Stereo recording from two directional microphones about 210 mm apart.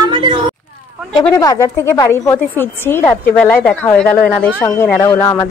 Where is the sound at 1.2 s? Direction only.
15° left (ahead or behind).